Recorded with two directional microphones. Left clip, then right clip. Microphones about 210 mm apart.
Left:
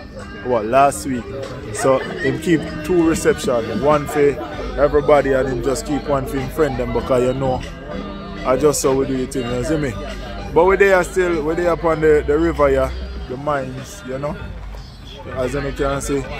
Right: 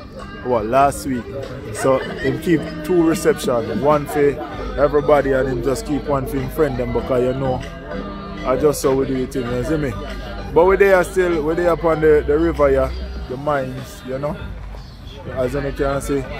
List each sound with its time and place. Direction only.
0.5 s speech: 5° left (ahead or behind)
7.1 s speech: 20° left (ahead or behind)
8.5 s speech: 15° left (ahead or behind); by 12.9 s centre (ahead or behind)
15.3 s speech: 5° right (ahead or behind)